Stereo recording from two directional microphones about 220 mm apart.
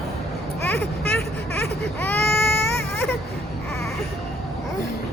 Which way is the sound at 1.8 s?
5° left (ahead or behind).